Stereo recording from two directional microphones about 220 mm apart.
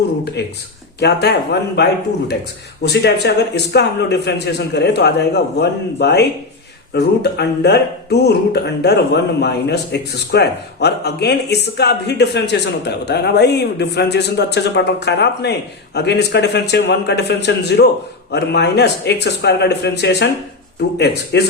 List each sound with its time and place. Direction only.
0.4 s speech: 45° left (ahead or behind)
21.3 s speech: 50° left (ahead or behind)